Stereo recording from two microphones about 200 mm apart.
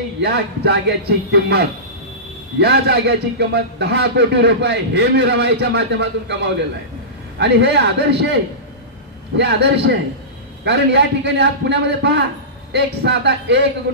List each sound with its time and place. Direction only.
0.2 s a man's voice: 55° right (ahead or behind)
9.4 s a man's voice: 60° right (ahead or behind)